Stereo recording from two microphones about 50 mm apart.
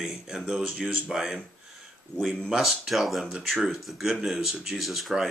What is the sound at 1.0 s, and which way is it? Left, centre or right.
Speech, centre.